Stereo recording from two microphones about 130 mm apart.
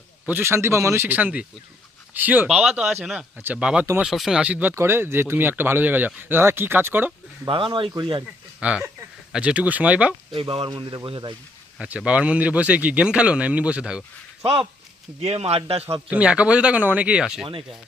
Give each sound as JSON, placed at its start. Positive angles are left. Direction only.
{"t": 0.3, "sound": "speech", "side_deg": -15}
{"t": 7.4, "sound": "speech", "side_deg": -40}
{"t": 8.6, "sound": "speech", "side_deg": -10}
{"t": 10.3, "sound": "a man's voice", "side_deg": -45}
{"t": 11.8, "sound": "speech", "side_deg": -10}
{"t": 14.4, "sound": "a man's voice", "side_deg": -40}
{"t": 16.0, "sound": "speech", "side_deg": -10}